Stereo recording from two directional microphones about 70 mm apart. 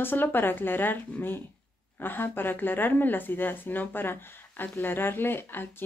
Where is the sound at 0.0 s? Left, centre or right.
Left.